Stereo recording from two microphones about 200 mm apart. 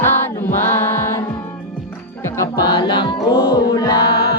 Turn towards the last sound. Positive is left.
turn(degrees=20)  # may be behind; listen again after turning